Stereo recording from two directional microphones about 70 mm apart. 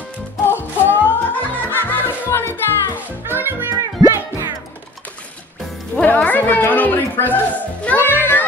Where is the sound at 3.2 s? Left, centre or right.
Right.